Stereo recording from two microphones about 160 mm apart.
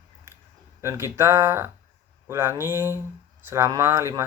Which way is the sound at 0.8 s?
15° right (ahead or behind).